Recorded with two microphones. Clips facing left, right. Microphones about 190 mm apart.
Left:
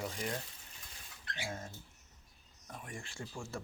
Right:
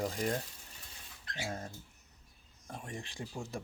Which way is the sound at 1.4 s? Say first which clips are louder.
Right 3 dB; 35° right (ahead or behind).